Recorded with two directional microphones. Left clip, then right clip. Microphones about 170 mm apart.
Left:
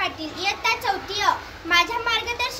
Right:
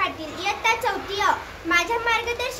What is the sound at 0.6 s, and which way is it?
A child's voice, 15° right (ahead or behind).